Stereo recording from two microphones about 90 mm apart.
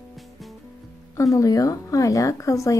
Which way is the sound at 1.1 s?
40° left (ahead or behind).